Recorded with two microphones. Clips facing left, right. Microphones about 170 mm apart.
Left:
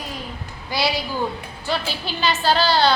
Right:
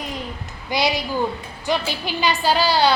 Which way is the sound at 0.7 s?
20° right (ahead or behind).